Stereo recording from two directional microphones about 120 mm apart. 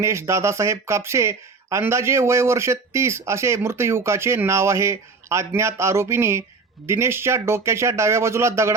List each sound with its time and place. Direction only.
0.0 s speech: 25° right (ahead or behind)